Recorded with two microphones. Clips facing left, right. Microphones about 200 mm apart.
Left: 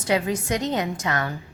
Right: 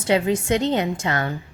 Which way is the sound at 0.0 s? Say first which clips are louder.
Right 3 dB; 25° right (ahead or behind).